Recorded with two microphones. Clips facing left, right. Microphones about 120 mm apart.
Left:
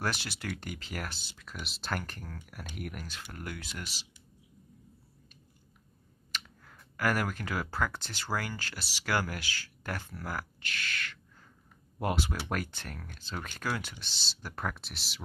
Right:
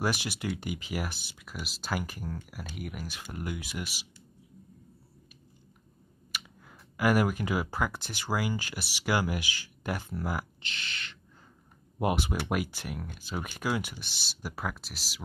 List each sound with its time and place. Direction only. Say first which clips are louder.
0.0 s speech: right 4 dB; 15° right (ahead or behind)
3.2 s speech: right 4 dB; 15° right (ahead or behind)
6.3 s speech: even; 10° right (ahead or behind)